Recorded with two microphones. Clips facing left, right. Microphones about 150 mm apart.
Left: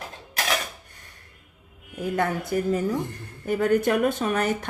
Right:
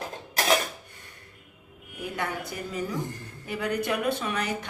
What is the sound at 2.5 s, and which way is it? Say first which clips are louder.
A woman's voice: left 8 dB; 50° left (ahead or behind).